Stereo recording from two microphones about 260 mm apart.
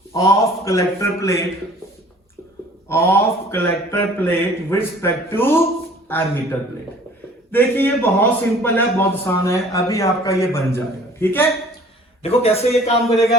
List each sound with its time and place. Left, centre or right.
0.1 s a man's voice: centre
2.9 s a man's voice: centre
7.5 s a man's voice: centre
12.2 s a man's voice: left